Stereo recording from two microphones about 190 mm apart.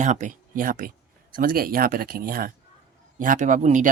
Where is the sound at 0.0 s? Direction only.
40° right (ahead or behind).